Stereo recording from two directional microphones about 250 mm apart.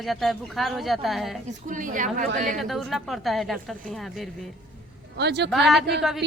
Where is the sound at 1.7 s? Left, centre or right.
Right.